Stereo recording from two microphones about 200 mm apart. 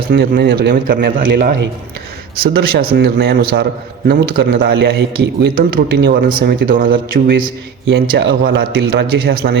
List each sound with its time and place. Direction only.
0.1 s a man's voice: 50° right (ahead or behind)
6.1 s a man's voice: 45° right (ahead or behind)